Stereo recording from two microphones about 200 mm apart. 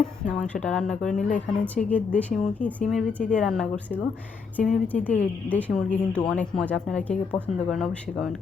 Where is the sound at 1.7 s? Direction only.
5° left (ahead or behind).